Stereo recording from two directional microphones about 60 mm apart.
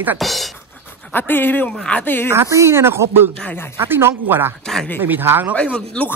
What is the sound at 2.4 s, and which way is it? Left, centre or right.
Speech, right.